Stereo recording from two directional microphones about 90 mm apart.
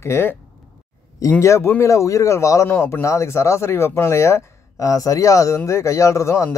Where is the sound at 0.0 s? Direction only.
30° left (ahead or behind).